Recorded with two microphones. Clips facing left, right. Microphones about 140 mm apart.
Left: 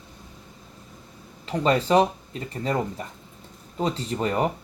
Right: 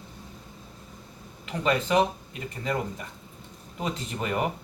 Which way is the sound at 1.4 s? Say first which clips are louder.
Left 4 dB; 35° left (ahead or behind).